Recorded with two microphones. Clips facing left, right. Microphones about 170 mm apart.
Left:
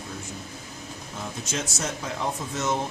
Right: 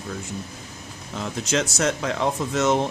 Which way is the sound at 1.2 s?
80° right.